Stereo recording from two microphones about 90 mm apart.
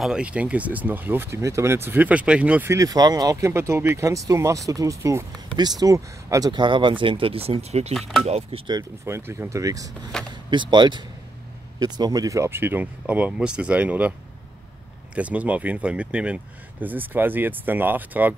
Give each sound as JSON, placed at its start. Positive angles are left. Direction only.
{"t": 0.0, "sound": "speech", "side_deg": -10}
{"t": 2.7, "sound": "speech", "side_deg": -40}
{"t": 5.6, "sound": "speech", "side_deg": -50}
{"t": 6.5, "sound": "speech", "side_deg": -65}
{"t": 7.9, "sound": "speech", "side_deg": 0}
{"t": 9.0, "sound": "speech", "side_deg": -30}
{"t": 10.1, "sound": "a sound", "side_deg": 5}
{"t": 10.5, "sound": "speech", "side_deg": -60}
{"t": 11.8, "sound": "speech", "side_deg": -45}
{"t": 12.4, "sound": "speech", "side_deg": -25}
{"t": 15.1, "sound": "speech", "side_deg": -15}